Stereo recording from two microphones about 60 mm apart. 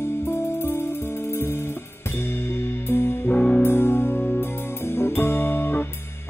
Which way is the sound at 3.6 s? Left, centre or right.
Left.